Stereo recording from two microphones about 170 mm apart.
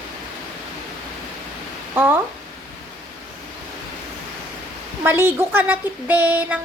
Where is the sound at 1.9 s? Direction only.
10° right (ahead or behind).